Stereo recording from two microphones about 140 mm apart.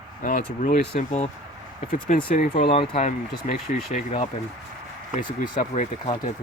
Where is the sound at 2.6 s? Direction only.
45° left (ahead or behind); by 4.3 s 60° left (ahead or behind).